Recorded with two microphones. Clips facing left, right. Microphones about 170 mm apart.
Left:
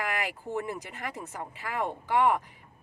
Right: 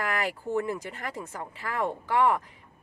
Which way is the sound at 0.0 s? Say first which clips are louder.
Right 3 dB; 10° left (ahead or behind).